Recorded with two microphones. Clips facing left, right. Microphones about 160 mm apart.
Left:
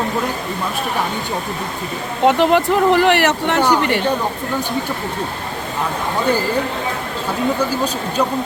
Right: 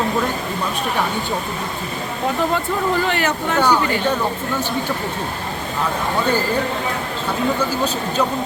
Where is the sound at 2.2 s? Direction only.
90° left; by 3.6 s 70° left (ahead or behind).